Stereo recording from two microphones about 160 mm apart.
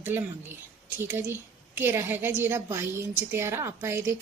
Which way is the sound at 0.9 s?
15° right (ahead or behind).